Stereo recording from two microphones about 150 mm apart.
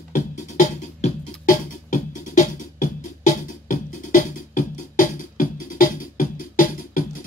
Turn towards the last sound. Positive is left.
turn(degrees=65)  # may be behind; listen again after turning